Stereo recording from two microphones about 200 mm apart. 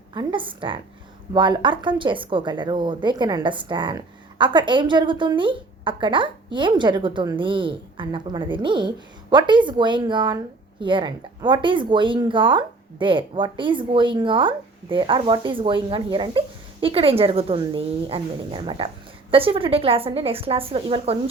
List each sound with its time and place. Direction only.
0.1 s a woman's voice: 25° right (ahead or behind)